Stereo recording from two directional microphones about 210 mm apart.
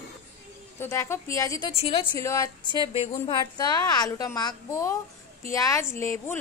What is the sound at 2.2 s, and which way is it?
A woman's voice, 15° left (ahead or behind).